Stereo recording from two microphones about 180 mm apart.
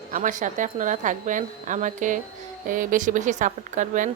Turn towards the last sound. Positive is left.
turn(degrees=-45)  # may be behind; listen again after turning